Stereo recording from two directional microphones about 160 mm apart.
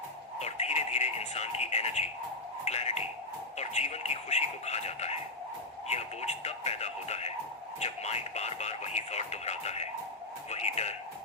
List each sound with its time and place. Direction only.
0.3 s music: 45° left (ahead or behind)
2.6 s a sound: 45° left (ahead or behind)
3.6 s speech: 45° left (ahead or behind)